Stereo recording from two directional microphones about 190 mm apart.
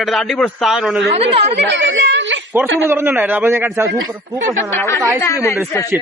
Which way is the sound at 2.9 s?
10° right (ahead or behind).